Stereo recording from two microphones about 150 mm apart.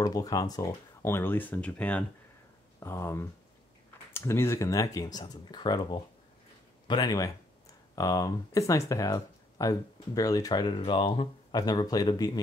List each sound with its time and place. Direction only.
0.0 s speech: 25° left (ahead or behind)